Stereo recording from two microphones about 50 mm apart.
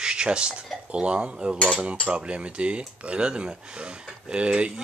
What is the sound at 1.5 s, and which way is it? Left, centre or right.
Cutlery, left.